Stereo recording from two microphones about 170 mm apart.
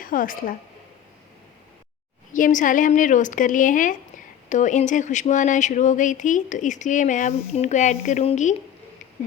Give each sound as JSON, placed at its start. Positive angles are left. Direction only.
{"t": 0.0, "sound": "a woman's voice", "side_deg": 55}
{"t": 2.3, "sound": "speech", "side_deg": 50}